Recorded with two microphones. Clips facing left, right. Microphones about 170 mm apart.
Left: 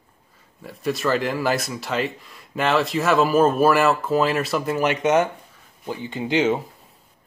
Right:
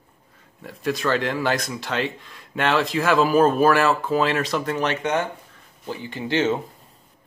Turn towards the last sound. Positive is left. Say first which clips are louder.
# left 2 dB
turn(degrees=15)  # may be behind; listen again after turning